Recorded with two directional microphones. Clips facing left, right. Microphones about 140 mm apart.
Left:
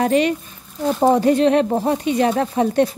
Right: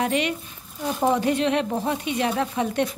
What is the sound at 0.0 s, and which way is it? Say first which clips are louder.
A woman's voice: left 7 dB; 40° left (ahead or behind).